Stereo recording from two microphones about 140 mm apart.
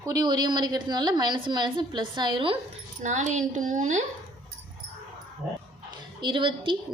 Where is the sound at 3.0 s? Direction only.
60° right (ahead or behind).